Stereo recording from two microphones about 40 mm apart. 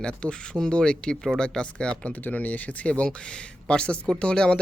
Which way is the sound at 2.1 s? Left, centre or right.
Left.